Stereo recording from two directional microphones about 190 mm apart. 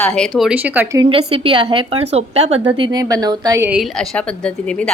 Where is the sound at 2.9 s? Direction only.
20° right (ahead or behind).